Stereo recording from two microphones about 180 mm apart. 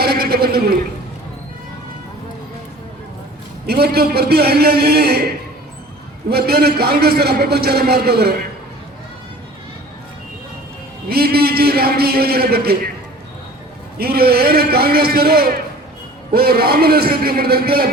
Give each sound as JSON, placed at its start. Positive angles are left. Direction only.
{"t": 0.0, "sound": "a sound", "side_deg": -60}
{"t": 3.7, "sound": "a man's voice", "side_deg": -60}
{"t": 6.3, "sound": "a man's voice", "side_deg": -60}
{"t": 11.1, "sound": "a man's voice", "side_deg": -60}
{"t": 14.0, "sound": "a man's voice", "side_deg": -60}